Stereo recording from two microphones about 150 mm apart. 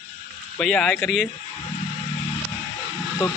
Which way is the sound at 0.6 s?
5° left (ahead or behind).